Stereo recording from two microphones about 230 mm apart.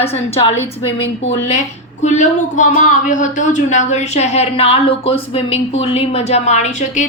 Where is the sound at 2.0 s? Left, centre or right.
Left.